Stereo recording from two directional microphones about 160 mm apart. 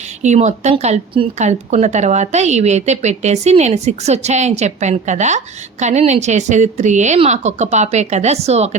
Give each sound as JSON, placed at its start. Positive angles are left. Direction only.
{"t": 0.2, "sound": "speech", "side_deg": -45}